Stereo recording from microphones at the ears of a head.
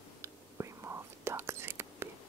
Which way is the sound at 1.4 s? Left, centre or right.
Right.